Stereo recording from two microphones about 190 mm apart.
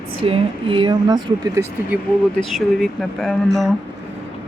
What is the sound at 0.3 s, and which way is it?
Speech, 25° right (ahead or behind).